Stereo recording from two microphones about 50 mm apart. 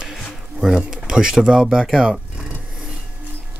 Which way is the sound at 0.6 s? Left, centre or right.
Centre.